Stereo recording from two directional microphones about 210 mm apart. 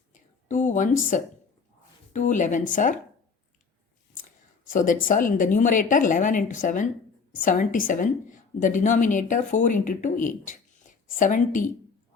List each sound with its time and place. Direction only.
0.1 s a sound: 35° left (ahead or behind)
2.1 s a woman's voice: 35° left (ahead or behind)
4.7 s a woman's voice: 40° left (ahead or behind)